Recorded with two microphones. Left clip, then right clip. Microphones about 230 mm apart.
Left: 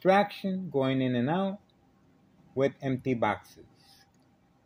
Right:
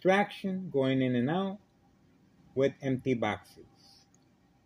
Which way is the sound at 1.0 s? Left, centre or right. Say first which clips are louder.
Left 1 dB; left.